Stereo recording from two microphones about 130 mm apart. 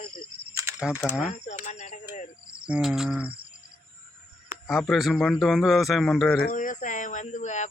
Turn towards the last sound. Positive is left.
turn(degrees=65)  # may be behind; listen again after turning